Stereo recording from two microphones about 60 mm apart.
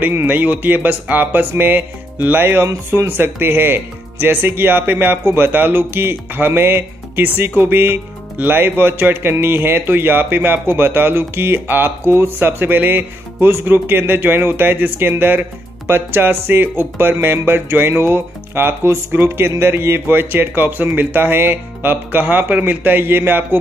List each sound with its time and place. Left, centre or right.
0.1 s speech: right